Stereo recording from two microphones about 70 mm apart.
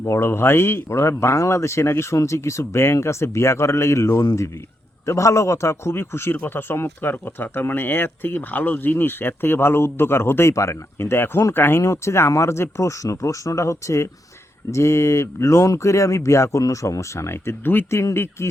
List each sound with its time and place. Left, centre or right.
0.0 s speech: left
11.8 s speech: left